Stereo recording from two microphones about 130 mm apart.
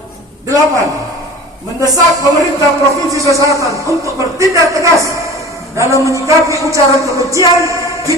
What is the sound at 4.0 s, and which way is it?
Speech, 25° right (ahead or behind).